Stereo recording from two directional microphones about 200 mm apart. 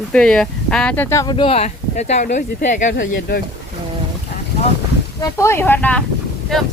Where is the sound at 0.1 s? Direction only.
5° left (ahead or behind); by 3.4 s 45° left (ahead or behind).